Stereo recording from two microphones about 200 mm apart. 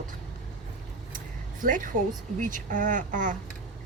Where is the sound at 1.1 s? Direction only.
40° right (ahead or behind).